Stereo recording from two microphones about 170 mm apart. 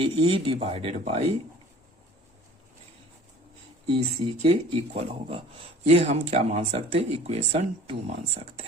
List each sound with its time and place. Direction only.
0.0 s speech: 35° right (ahead or behind)
3.9 s speech: 35° right (ahead or behind)